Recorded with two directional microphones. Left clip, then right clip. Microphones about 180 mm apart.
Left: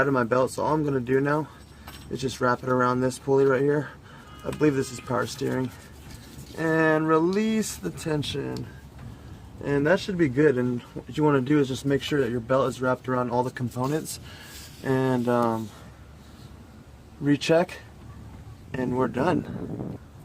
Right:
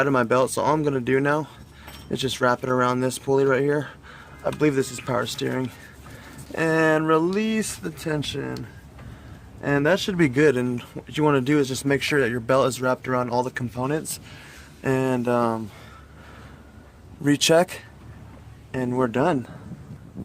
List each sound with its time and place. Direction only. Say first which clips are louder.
0.0 s speech: right 3 dB; 40° right (ahead or behind)
9.6 s speech: right 2 dB; 35° right (ahead or behind); by 10.8 s 55° right (ahead or behind)
11.1 s speech: right 2 dB; 40° right (ahead or behind)
17.2 s speech: right 4 dB; 45° right (ahead or behind)
18.7 s speech: right 3 dB; 30° right (ahead or behind)